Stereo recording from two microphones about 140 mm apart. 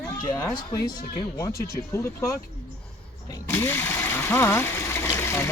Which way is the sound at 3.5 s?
15° left (ahead or behind).